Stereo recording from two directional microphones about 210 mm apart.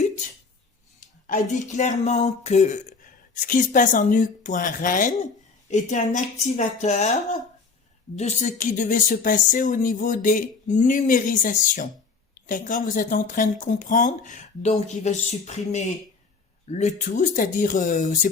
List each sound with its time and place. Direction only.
0.9 s speech: 35° left (ahead or behind)